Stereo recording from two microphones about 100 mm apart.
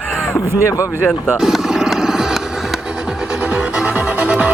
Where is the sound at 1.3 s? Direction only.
5° right (ahead or behind).